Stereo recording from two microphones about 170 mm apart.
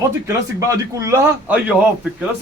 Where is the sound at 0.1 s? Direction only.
15° right (ahead or behind).